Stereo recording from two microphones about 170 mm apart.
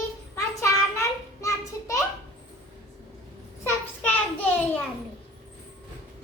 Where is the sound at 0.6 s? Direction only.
20° left (ahead or behind).